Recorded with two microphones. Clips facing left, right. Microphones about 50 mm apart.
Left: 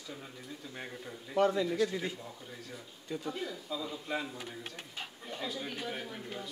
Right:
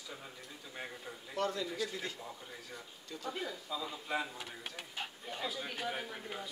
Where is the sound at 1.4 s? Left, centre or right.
Centre.